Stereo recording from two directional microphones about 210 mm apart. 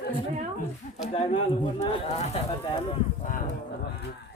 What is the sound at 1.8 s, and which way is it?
Speech, 30° left (ahead or behind).